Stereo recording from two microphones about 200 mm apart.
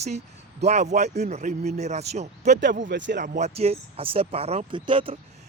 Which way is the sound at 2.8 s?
60° right (ahead or behind).